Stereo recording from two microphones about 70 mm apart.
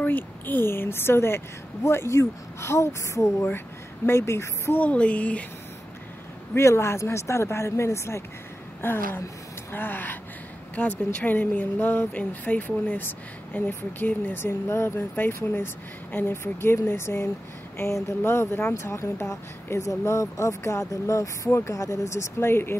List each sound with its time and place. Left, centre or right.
0.0 s a woman's voice: left
3.4 s speech: left
4.7 s speech: centre
6.5 s a woman's voice: left
14.4 s a woman's voice: left